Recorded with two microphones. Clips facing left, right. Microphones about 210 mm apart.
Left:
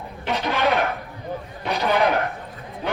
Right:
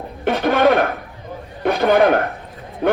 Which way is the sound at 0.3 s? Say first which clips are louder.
Right 7 dB; 50° right (ahead or behind).